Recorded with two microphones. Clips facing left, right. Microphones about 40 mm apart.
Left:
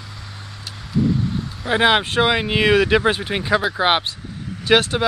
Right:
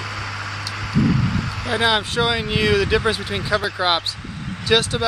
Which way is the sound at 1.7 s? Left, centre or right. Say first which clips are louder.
Left 3 dB; left.